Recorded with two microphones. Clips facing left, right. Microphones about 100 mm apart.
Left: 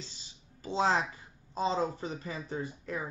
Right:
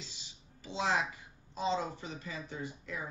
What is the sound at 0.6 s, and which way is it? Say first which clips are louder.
Speech: left 4 dB; 40° left (ahead or behind).